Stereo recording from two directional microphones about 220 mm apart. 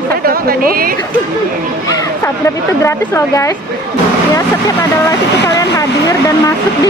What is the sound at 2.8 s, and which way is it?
Speech, 15° left (ahead or behind).